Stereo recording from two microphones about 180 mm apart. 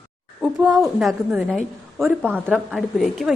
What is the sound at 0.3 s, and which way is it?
A woman's voice, 5° right (ahead or behind).